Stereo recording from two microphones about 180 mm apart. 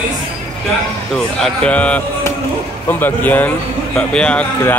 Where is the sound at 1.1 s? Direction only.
5° left (ahead or behind).